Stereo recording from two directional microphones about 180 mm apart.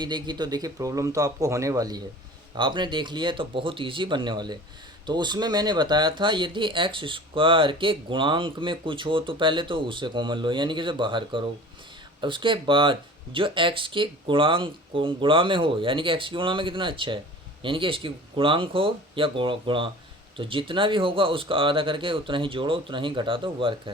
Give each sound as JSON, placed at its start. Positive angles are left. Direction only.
{"t": 0.0, "sound": "speech", "side_deg": -25}